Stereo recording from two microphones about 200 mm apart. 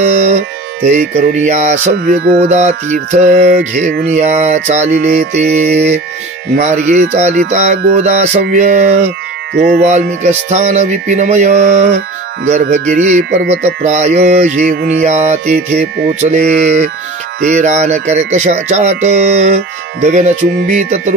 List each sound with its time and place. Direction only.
0.0 s music: 35° right (ahead or behind)
0.8 s speech: 35° right (ahead or behind)
9.5 s speech: 55° right (ahead or behind)
9.8 s speech: 35° right (ahead or behind)